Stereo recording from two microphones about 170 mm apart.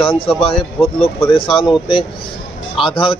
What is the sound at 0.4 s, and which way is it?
A man's voice, 30° left (ahead or behind).